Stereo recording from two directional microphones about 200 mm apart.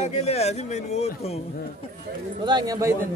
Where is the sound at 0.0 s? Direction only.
35° left (ahead or behind).